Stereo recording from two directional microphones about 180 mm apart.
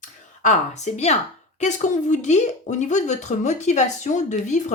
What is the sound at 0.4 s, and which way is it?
A woman's voice, 40° left (ahead or behind).